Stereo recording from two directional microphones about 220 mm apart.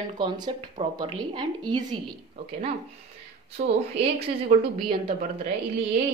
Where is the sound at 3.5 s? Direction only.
30° right (ahead or behind).